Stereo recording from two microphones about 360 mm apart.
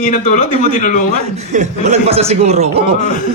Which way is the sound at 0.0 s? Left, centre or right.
Centre.